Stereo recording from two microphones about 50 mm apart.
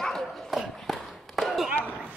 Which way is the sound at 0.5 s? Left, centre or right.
Centre.